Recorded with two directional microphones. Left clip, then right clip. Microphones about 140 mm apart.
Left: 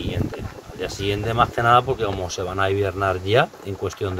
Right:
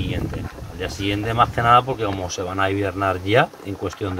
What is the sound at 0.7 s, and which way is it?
Speech, 25° left (ahead or behind).